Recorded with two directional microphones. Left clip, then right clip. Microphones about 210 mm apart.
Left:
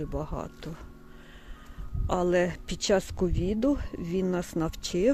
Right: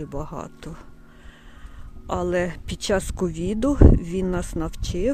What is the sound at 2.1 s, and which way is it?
Speech, 10° right (ahead or behind).